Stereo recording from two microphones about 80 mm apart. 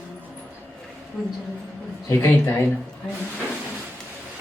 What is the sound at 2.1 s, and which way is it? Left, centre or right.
Speech, left.